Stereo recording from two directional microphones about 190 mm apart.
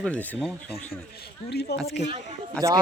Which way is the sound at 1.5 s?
60° left (ahead or behind).